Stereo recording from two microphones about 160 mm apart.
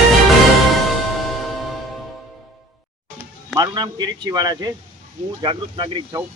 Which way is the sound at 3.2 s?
25° right (ahead or behind).